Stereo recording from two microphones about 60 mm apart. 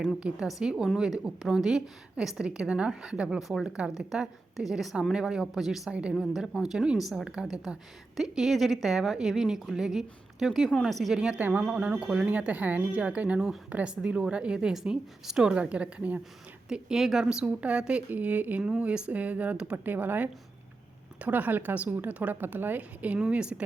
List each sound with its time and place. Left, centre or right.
0.2 s a woman's voice: centre
3.4 s a woman's voice: centre
5.9 s a woman's voice: centre
6.1 s a woman's voice: centre
11.3 s a woman's voice: right
16.6 s a woman's voice: centre
17.4 s a woman's voice: centre
18.1 s a woman's voice: right
18.6 s a woman's voice: centre
19.7 s a woman's voice: right